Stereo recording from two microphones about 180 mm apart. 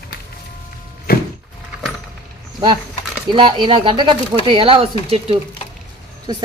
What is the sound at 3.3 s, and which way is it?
Speech, 25° right (ahead or behind).